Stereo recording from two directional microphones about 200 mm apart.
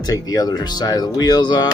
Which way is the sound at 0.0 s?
20° left (ahead or behind).